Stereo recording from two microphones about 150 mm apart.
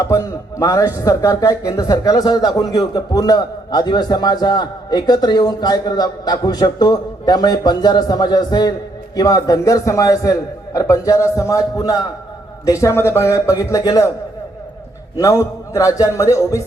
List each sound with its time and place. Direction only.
0.0 s a man's voice: 20° left (ahead or behind)
15.1 s a man's voice: 20° left (ahead or behind)